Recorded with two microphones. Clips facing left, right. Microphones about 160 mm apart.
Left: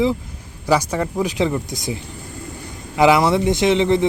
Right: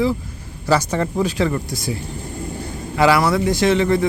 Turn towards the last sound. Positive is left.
turn(degrees=20)  # may be behind; listen again after turning